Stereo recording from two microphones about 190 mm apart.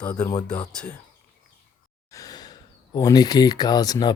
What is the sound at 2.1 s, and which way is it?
Speech, 20° left (ahead or behind).